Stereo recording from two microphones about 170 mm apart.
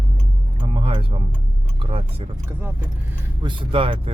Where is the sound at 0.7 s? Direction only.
30° right (ahead or behind).